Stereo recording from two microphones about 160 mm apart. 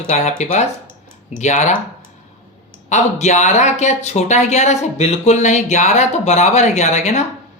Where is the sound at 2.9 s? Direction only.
45° left (ahead or behind).